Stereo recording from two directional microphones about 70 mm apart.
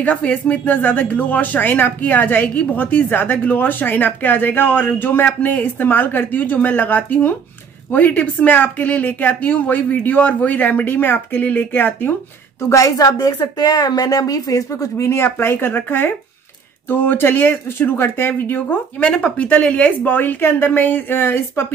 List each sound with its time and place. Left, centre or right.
0.0 s speech: left
12.6 s a woman's voice: left
19.0 s speech: centre; by 21.6 s left